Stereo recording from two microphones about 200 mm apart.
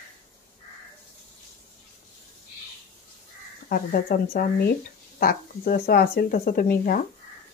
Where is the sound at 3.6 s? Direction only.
45° left (ahead or behind).